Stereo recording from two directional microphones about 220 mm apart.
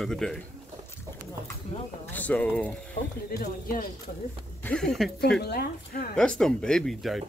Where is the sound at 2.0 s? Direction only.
10° left (ahead or behind).